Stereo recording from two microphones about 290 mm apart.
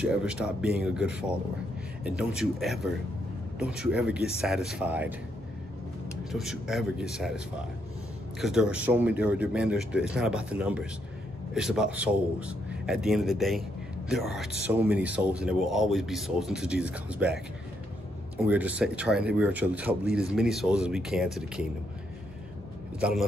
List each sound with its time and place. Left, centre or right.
0.0 s speech: centre
6.3 s speech: centre
18.5 s speech: centre
22.9 s speech: centre